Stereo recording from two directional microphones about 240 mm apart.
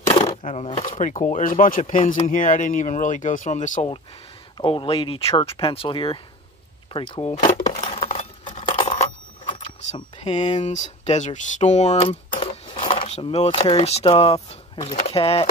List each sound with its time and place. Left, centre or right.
0.1 s speech: left
6.9 s coin: left